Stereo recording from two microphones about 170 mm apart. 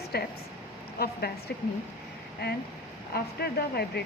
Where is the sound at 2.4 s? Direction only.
70° left (ahead or behind).